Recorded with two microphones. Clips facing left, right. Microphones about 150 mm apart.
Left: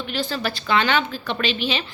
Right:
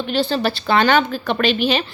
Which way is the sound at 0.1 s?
30° right (ahead or behind).